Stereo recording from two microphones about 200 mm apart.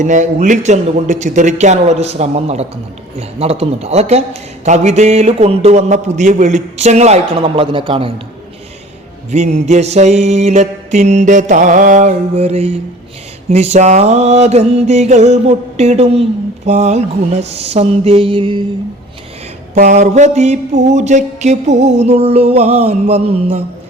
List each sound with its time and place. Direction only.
0.0 s mantra: 40° right (ahead or behind)
9.3 s mantra: 35° right (ahead or behind)
19.7 s mantra: 40° right (ahead or behind)